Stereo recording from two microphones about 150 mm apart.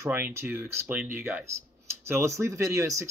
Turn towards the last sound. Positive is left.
turn(degrees=-20)  # may be behind; listen again after turning